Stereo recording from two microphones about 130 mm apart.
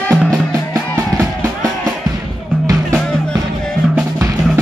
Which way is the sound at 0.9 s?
25° right (ahead or behind).